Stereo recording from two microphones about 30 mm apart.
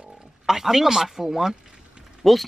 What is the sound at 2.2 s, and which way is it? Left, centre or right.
Speech, centre.